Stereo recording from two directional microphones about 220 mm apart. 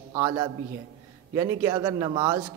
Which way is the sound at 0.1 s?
20° right (ahead or behind).